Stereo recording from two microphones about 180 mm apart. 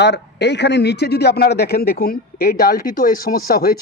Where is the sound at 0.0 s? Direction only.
70° left (ahead or behind).